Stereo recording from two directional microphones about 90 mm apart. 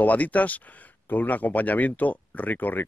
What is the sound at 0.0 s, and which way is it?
Speech, 15° left (ahead or behind).